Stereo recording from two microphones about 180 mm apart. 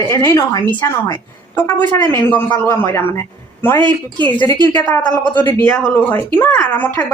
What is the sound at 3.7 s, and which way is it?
Speech, 25° right (ahead or behind).